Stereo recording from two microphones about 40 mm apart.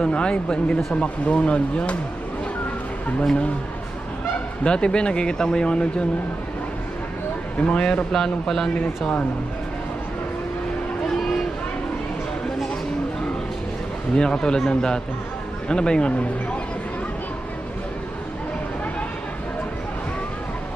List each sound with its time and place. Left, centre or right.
0.0 s speech: left
4.6 s speech: left
7.5 s speech: left
8.1 s speech: centre
14.1 s speech: left